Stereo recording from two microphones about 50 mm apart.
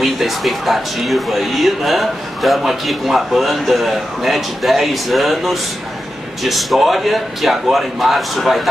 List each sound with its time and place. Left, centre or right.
0.0 s speech: centre